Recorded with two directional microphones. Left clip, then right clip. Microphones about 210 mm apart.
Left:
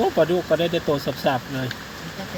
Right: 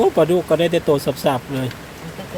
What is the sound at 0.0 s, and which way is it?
Speech, 20° right (ahead or behind).